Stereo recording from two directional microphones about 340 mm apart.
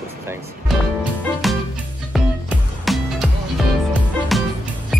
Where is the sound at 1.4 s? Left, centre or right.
Centre.